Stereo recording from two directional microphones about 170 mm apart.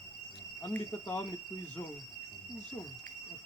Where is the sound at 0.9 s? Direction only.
25° left (ahead or behind).